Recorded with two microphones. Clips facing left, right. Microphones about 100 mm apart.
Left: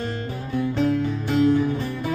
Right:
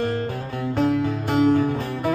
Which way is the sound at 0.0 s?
45° right (ahead or behind).